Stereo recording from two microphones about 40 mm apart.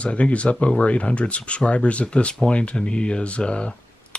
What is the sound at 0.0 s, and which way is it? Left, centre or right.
Speech, left.